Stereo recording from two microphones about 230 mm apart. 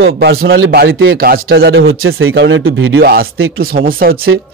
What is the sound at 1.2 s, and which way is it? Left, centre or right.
A man's voice, right.